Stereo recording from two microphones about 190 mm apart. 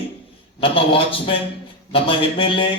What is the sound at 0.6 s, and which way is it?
A man's voice, 30° left (ahead or behind).